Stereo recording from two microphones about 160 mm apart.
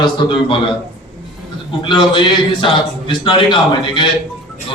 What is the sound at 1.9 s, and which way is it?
A man's voice, 30° left (ahead or behind).